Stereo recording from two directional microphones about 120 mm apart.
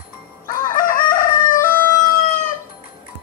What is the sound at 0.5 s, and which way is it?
Crowing, 90° left.